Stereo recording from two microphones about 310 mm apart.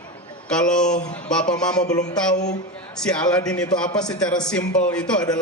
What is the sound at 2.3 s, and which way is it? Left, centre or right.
Speech, left.